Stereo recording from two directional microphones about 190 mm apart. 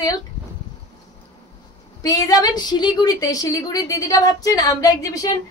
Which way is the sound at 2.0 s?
20° left (ahead or behind).